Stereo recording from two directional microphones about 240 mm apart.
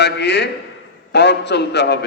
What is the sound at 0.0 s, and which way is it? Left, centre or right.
A man's voice, left.